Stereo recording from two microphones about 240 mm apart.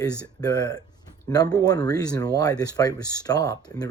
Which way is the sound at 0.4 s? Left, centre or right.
Centre.